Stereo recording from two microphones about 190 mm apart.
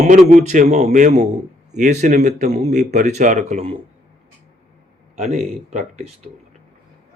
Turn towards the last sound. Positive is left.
turn(degrees=-40)  # may be behind; listen again after turning